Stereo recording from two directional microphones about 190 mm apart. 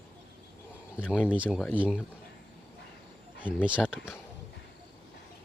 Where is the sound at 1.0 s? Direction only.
10° left (ahead or behind).